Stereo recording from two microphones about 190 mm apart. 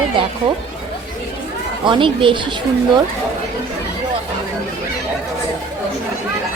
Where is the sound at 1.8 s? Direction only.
25° right (ahead or behind).